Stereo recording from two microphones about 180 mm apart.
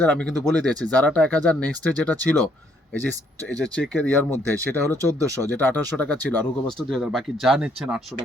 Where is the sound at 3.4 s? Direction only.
5° left (ahead or behind).